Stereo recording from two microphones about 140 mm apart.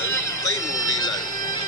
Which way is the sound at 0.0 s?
20° left (ahead or behind).